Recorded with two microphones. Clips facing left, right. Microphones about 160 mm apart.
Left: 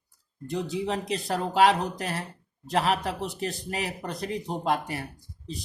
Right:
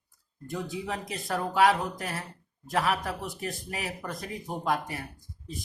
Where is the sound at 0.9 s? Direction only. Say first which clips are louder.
Left 5 dB; 25° left (ahead or behind).